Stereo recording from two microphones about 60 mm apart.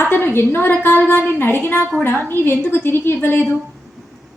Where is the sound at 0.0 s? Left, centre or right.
Left.